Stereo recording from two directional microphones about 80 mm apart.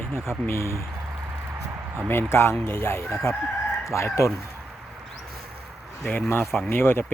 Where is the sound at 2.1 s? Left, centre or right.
Left.